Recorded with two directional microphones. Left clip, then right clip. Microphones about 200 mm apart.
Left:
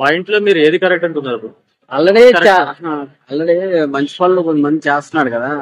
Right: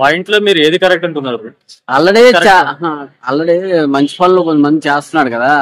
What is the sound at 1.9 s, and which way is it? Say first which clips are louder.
A man's voice: right 1 dB; 55° right (ahead or behind).